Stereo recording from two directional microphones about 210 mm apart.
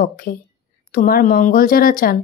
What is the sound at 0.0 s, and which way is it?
Speech, 45° left (ahead or behind).